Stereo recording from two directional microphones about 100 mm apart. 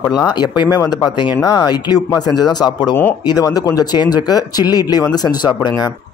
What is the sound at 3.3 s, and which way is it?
Speech, 40° left (ahead or behind).